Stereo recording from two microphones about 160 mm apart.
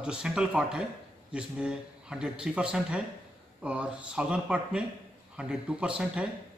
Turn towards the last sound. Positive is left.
turn(degrees=-5)  # may be behind; listen again after turning